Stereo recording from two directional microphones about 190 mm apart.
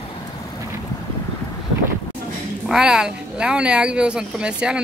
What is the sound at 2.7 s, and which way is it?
Speech, 5° right (ahead or behind).